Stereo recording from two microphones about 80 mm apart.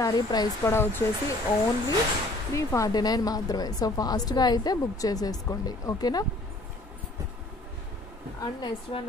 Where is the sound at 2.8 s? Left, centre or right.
Left.